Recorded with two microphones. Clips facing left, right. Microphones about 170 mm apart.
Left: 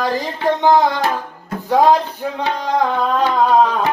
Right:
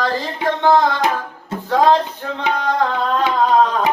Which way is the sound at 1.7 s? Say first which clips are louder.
Left 1 dB; 15° left (ahead or behind).